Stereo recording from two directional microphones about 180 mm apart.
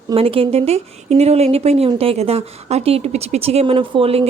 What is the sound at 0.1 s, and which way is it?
Speech, 30° right (ahead or behind).